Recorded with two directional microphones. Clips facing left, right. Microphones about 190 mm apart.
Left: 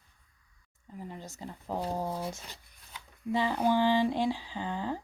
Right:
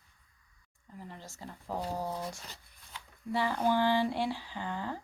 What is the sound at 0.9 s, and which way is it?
A woman's voice, 15° left (ahead or behind).